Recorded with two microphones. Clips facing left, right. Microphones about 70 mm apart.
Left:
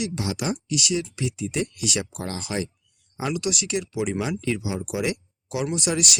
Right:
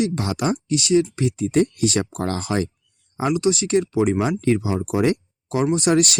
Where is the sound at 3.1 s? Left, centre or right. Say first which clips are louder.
Right 7 dB; right.